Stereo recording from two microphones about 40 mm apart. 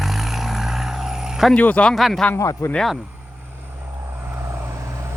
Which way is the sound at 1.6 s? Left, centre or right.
Left.